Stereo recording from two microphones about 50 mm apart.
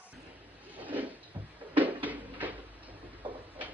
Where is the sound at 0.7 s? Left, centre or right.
Right.